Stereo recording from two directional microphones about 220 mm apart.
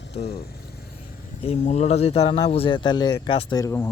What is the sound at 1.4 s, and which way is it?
A man's voice, 30° left (ahead or behind).